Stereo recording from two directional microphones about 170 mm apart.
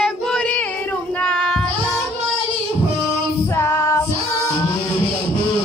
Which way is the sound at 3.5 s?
15° left (ahead or behind).